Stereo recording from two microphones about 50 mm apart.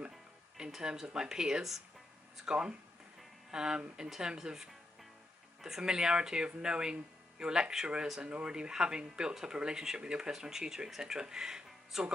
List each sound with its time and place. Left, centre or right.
0.7 s speech: centre